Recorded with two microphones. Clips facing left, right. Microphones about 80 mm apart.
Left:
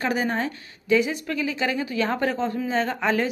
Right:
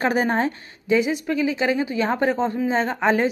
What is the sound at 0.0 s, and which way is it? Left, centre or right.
A woman's voice, right.